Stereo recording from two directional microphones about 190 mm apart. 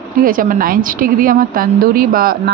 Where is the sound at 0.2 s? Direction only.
50° right (ahead or behind).